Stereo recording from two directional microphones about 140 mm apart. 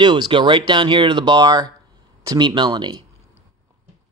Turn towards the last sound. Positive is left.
turn(degrees=-30)  # may be behind; listen again after turning